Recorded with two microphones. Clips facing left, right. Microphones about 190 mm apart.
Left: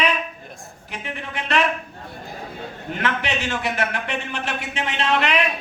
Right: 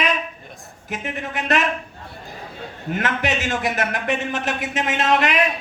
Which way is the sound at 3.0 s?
45° right (ahead or behind).